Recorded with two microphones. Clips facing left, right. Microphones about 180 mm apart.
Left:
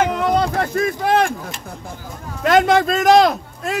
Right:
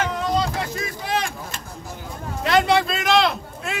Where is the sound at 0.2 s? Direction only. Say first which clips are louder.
Left 5 dB; 60° left (ahead or behind).